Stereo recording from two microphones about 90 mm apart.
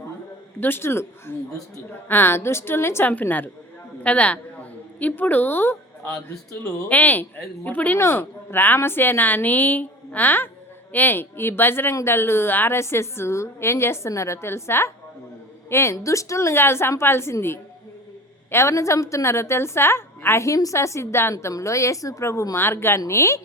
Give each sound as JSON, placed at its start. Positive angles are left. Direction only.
{"t": 0.6, "sound": "a man's voice", "side_deg": 25}
{"t": 6.8, "sound": "a woman's voice", "side_deg": 20}